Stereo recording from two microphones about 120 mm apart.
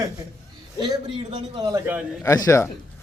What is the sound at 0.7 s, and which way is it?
A man's voice, 40° right (ahead or behind).